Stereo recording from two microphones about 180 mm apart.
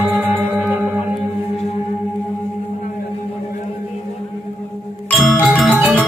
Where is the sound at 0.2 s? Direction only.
10° right (ahead or behind).